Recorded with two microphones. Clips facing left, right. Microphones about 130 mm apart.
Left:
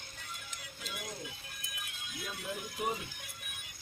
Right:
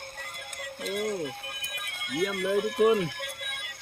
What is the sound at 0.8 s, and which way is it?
Speech, 60° right (ahead or behind).